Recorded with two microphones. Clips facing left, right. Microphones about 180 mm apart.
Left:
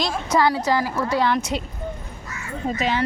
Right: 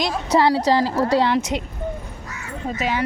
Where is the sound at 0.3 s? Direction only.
30° right (ahead or behind).